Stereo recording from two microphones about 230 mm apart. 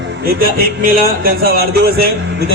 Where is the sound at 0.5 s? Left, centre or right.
Right.